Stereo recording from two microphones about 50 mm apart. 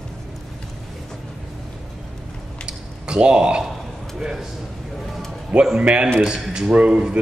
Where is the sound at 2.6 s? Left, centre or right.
Centre.